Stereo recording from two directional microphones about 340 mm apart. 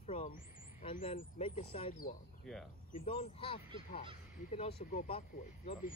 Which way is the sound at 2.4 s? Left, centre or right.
Centre.